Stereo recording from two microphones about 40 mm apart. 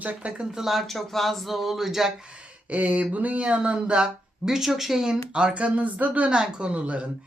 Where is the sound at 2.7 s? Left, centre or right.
Right.